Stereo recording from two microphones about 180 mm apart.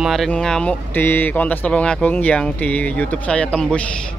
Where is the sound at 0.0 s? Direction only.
Centre (ahead or behind).